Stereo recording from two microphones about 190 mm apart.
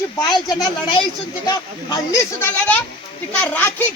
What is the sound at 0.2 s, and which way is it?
Speech, 20° left (ahead or behind).